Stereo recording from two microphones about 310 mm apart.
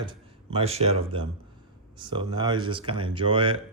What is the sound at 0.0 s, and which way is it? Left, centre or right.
Speech, centre.